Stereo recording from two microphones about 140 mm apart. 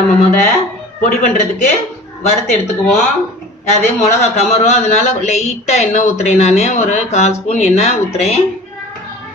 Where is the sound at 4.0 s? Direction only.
50° left (ahead or behind).